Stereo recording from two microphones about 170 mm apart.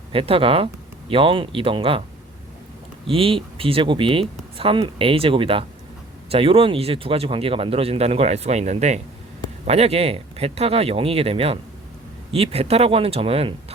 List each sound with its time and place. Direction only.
0.1 s speech: 35° right (ahead or behind)
3.1 s speech: 35° right (ahead or behind)